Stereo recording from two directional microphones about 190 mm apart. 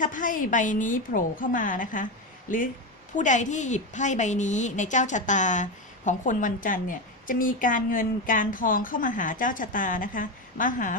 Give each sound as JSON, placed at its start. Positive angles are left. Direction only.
{"t": 0.0, "sound": "a woman's voice", "side_deg": 45}